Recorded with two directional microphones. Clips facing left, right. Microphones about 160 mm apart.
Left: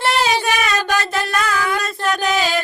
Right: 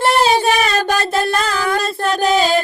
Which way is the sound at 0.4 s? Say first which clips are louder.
Right 4 dB; 30° right (ahead or behind).